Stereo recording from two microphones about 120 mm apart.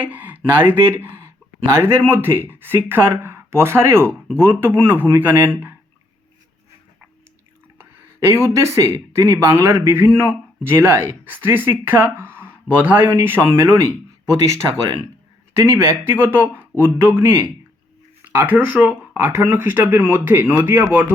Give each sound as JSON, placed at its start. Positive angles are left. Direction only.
{"t": 0.0, "sound": "speech", "side_deg": -15}
{"t": 8.3, "sound": "speech", "side_deg": -20}
{"t": 15.6, "sound": "speech", "side_deg": -20}